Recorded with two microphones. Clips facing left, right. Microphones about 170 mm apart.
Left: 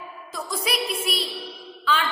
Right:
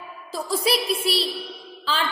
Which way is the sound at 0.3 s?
30° right (ahead or behind).